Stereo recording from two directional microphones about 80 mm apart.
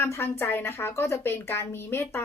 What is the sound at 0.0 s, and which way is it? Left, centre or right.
A woman's voice, left.